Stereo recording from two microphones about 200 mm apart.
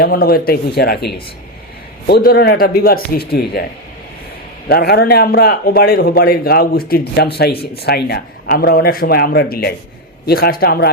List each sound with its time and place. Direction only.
0.0 s a man's voice: 50° left (ahead or behind)
4.7 s a man's voice: 50° left (ahead or behind)